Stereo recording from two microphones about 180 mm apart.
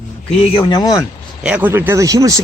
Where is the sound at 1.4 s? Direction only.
10° right (ahead or behind).